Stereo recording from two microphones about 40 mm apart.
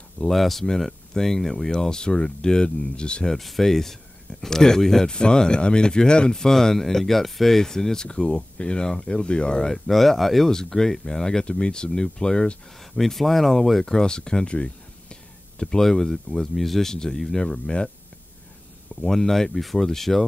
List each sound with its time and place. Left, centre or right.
0.3 s speech: centre; by 3.3 s left
3.3 s speech: centre; by 9.7 s left
9.7 s speech: centre
10.5 s speech: centre
12.9 s speech: centre; by 15.1 s left
15.8 s speech: centre
17.4 s speech: left
18.9 s speech: centre